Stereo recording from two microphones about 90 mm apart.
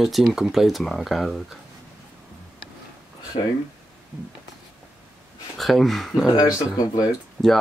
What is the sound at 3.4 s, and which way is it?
Speech, 70° left (ahead or behind).